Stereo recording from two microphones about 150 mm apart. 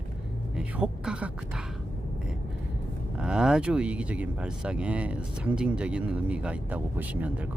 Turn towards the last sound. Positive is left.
turn(degrees=-10)  # may be behind; listen again after turning